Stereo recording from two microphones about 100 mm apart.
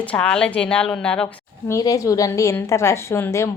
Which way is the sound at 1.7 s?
35° left (ahead or behind).